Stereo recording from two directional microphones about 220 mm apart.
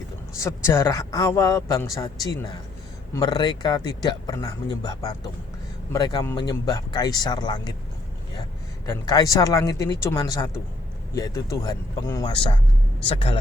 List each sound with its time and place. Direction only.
0.3 s a man's voice: 15° left (ahead or behind)
8.9 s a man's voice: 15° left (ahead or behind)